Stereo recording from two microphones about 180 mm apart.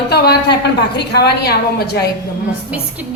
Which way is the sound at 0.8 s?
65° left (ahead or behind).